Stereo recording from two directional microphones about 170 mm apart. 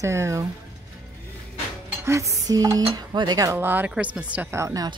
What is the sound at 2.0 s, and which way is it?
Speech, 20° right (ahead or behind).